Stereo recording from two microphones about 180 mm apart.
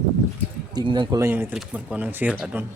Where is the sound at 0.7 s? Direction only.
25° right (ahead or behind).